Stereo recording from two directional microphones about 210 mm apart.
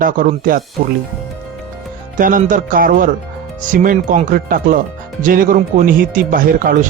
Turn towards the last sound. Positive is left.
turn(degrees=-40)  # may be behind; listen again after turning